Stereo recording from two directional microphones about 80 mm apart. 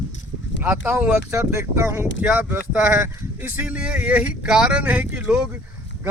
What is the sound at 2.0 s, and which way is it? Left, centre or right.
Speech, centre.